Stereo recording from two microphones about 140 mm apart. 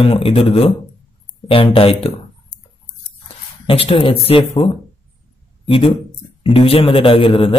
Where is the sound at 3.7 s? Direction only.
40° left (ahead or behind).